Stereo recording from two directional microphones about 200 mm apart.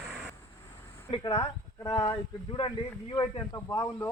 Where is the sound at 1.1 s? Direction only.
25° left (ahead or behind).